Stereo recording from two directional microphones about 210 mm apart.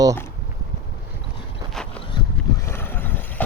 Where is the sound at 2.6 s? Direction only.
10° left (ahead or behind).